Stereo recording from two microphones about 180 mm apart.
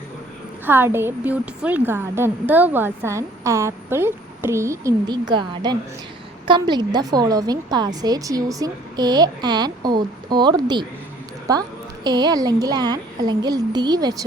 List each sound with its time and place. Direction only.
0.6 s a woman's voice: 10° right (ahead or behind)
12.0 s a woman's voice: 25° right (ahead or behind)